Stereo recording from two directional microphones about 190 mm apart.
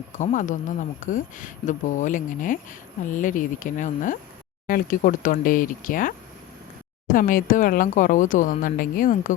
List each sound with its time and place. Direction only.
0.2 s speech: 40° left (ahead or behind)